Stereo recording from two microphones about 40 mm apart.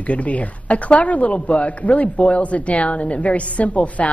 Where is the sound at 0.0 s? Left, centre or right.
Left.